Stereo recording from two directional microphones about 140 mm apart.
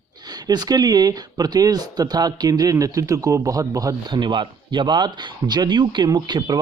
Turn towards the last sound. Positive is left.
turn(degrees=-30)  # may be behind; listen again after turning